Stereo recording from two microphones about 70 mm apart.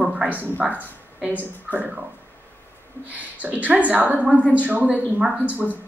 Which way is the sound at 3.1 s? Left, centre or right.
Right.